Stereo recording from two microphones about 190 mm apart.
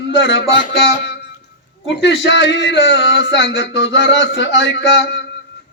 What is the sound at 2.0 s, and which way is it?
Music, 70° left (ahead or behind).